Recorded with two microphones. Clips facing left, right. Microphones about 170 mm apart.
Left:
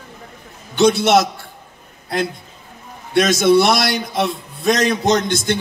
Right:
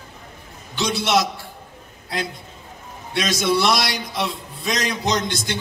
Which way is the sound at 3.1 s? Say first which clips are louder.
Left 8 dB; 50° left (ahead or behind).